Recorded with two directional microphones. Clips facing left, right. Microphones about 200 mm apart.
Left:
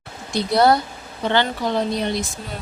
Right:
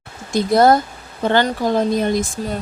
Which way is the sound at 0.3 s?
45° right (ahead or behind).